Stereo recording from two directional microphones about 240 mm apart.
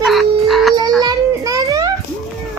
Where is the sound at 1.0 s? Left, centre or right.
Centre.